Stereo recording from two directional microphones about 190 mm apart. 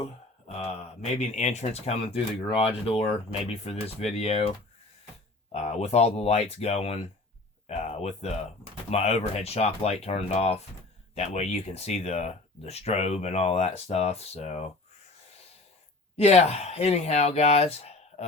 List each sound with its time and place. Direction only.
1.2 s speech: 35° left (ahead or behind)
7.7 s a sound: 35° left (ahead or behind)
8.9 s speech: 35° left (ahead or behind)
16.1 s speech: 35° left (ahead or behind)